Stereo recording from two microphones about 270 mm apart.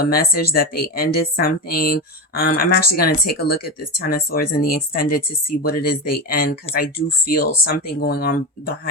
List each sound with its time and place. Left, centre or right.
0.0 s speech: left